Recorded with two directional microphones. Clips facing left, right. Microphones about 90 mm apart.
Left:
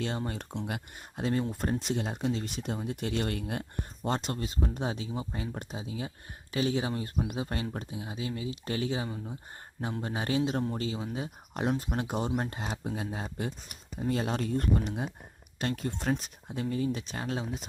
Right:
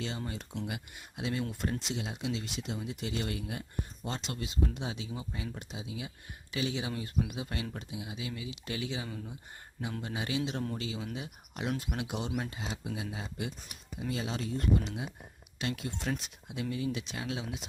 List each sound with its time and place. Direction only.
0.3 s speech: 50° left (ahead or behind)
9.0 s speech: 20° left (ahead or behind)
10.0 s speech: 40° left (ahead or behind)